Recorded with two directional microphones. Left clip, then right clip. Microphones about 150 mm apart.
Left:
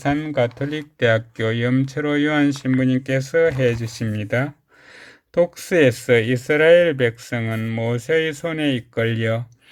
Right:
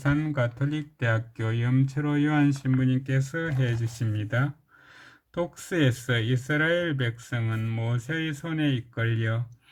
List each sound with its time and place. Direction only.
0.3 s speech: 15° left (ahead or behind)
1.0 s speech: 25° left (ahead or behind)